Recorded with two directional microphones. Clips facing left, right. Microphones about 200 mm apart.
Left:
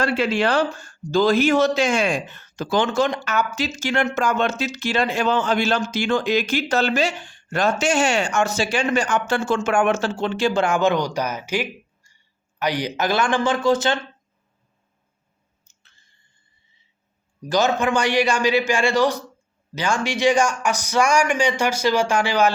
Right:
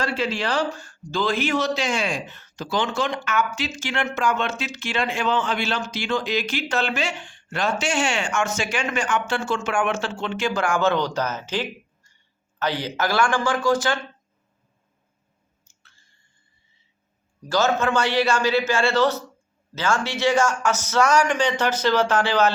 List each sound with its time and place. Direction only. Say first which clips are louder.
0.0 s a man's voice: left 5 dB; 60° left (ahead or behind); by 14.0 s 20° left (ahead or behind)
15.7 s chewing: right 1 dB; 20° left (ahead or behind)
17.4 s a man's voice: left 1 dB; 15° left (ahead or behind)